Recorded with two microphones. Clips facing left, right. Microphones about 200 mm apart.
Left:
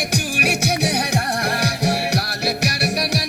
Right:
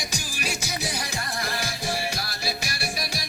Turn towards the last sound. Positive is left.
turn(degrees=70)  # may be behind; listen again after turning